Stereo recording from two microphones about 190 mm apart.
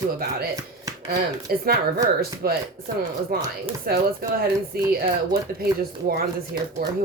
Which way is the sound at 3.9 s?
55° right (ahead or behind).